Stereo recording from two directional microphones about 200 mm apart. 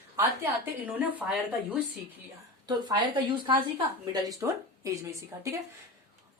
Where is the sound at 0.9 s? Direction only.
5° right (ahead or behind).